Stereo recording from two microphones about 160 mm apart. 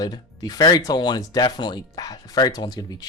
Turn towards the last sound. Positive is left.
turn(degrees=25)  # may be behind; listen again after turning